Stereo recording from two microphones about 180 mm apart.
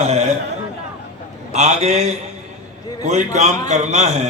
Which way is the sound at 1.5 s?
40° right (ahead or behind).